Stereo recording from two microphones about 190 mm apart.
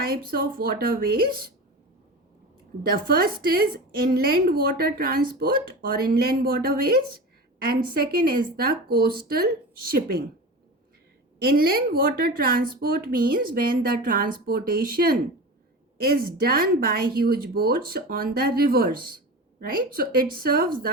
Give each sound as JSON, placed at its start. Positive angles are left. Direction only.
{"t": 0.0, "sound": "speech", "side_deg": -50}
{"t": 2.8, "sound": "speech", "side_deg": -50}
{"t": 11.4, "sound": "speech", "side_deg": -50}